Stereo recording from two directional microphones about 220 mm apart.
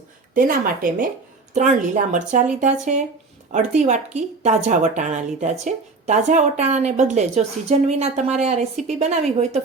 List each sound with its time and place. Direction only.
0.3 s a woman's voice: 40° right (ahead or behind)